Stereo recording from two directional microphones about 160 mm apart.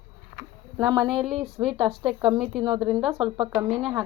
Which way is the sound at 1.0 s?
Centre (ahead or behind).